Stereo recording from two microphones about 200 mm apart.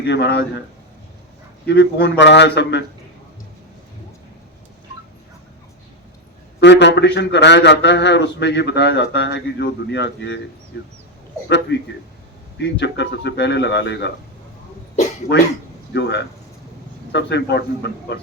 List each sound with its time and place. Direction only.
0.0 s a man's voice: 55° left (ahead or behind)
1.6 s a man's voice: 55° left (ahead or behind)
6.6 s a man's voice: 60° left (ahead or behind)
11.4 s a man's voice: 60° left (ahead or behind)
12.8 s a man's voice: 60° left (ahead or behind)
15.3 s a man's voice: 55° left (ahead or behind)